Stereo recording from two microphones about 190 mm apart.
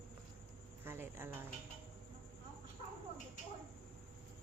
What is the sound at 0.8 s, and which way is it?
Speech, 10° right (ahead or behind).